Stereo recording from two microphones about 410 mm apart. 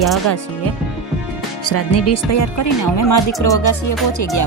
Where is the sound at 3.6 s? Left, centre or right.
Left.